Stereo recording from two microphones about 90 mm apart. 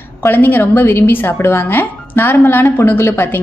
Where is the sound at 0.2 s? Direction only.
25° left (ahead or behind).